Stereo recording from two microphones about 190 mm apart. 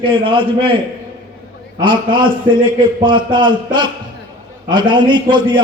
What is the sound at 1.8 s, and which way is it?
A man's voice, 25° right (ahead or behind).